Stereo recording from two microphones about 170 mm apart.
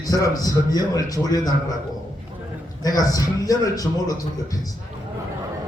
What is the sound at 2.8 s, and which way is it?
A man's voice, 20° left (ahead or behind).